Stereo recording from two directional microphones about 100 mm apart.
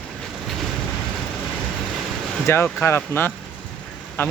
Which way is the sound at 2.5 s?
25° left (ahead or behind).